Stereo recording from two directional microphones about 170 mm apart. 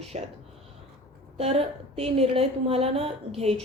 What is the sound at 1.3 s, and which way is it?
A woman's voice, 35° right (ahead or behind).